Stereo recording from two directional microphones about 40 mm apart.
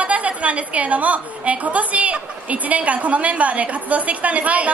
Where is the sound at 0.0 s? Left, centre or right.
Right.